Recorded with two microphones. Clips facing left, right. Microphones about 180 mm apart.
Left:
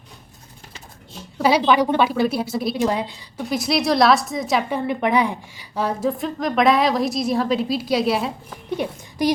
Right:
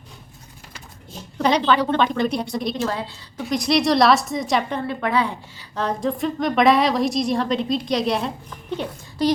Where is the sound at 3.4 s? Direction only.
Centre (ahead or behind).